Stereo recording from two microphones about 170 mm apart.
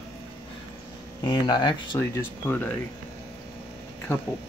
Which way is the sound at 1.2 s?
25° left (ahead or behind).